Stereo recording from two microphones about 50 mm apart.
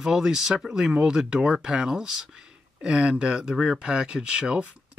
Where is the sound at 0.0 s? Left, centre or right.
Centre.